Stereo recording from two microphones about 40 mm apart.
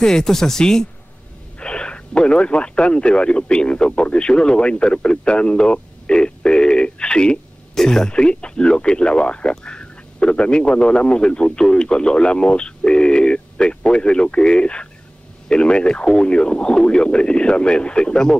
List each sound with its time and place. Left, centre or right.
0.0 s speech: centre
1.6 s speech: left
7.7 s speech: centre